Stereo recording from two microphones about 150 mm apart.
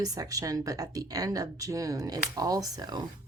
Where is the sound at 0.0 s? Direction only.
25° right (ahead or behind).